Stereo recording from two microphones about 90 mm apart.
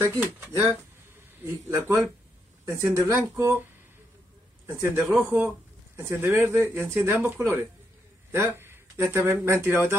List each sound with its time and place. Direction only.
0.5 s speech: 30° right (ahead or behind)
4.7 s speech: 20° right (ahead or behind)